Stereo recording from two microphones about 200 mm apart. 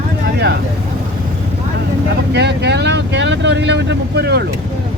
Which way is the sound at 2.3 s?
60° right (ahead or behind).